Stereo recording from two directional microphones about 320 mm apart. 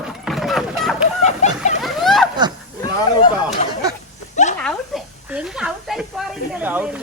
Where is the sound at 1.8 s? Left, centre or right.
Centre.